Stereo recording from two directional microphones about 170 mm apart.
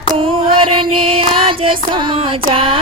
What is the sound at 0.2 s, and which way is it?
Music, 35° right (ahead or behind).